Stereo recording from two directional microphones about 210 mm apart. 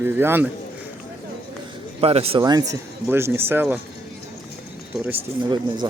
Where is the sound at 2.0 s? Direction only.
25° right (ahead or behind).